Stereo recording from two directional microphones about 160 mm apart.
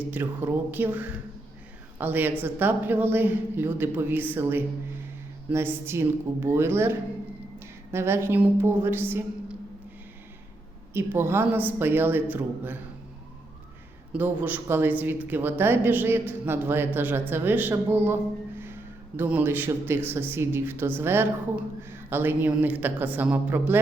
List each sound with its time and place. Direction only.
0.1 s a woman's voice: 10° right (ahead or behind)
7.9 s a woman's voice: 15° right (ahead or behind)
10.9 s a woman's voice: 15° right (ahead or behind)
14.1 s a woman's voice: 10° right (ahead or behind)